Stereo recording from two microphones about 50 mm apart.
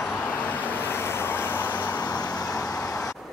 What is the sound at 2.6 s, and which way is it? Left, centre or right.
Vehicle, left.